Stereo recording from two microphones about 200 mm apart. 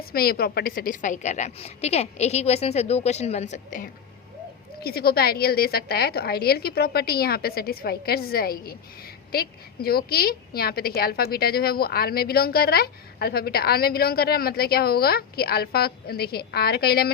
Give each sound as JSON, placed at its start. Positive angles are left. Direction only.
{"t": 0.0, "sound": "a woman's voice", "side_deg": 50}
{"t": 4.8, "sound": "a woman's voice", "side_deg": 50}